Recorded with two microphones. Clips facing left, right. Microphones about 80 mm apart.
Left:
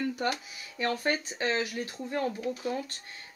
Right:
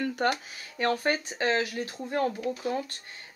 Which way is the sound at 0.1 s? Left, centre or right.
Right.